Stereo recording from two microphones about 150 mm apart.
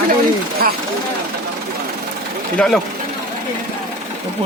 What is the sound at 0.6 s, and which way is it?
Speech, 85° right.